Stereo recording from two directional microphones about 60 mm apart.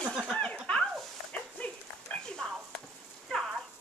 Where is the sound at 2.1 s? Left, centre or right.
Left.